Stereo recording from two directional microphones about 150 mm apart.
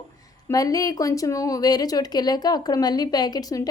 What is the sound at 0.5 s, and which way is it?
A woman's voice, 25° left (ahead or behind).